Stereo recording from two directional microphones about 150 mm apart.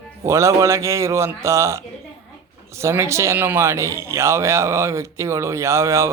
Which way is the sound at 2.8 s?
20° right (ahead or behind).